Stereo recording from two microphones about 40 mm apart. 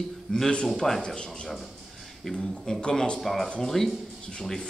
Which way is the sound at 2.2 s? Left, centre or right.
Centre.